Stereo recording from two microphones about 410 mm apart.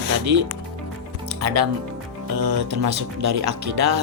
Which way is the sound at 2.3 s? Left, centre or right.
Right.